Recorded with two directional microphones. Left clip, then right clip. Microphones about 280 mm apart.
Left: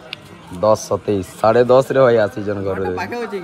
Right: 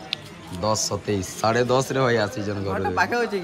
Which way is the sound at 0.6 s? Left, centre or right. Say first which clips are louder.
Left 9 dB; centre.